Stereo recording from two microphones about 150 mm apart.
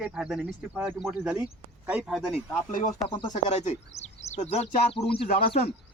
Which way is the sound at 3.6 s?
50° left (ahead or behind).